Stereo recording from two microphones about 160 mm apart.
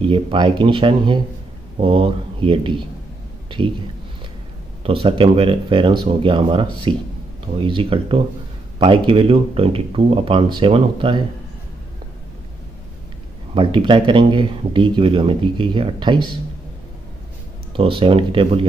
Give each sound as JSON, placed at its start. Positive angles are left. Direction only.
{"t": 0.0, "sound": "speech", "side_deg": -30}
{"t": 4.8, "sound": "speech", "side_deg": -35}
{"t": 13.6, "sound": "speech", "side_deg": -30}
{"t": 17.7, "sound": "speech", "side_deg": -35}